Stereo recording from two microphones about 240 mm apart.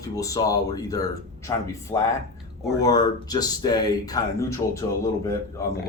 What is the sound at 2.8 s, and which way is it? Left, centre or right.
A man's voice, centre.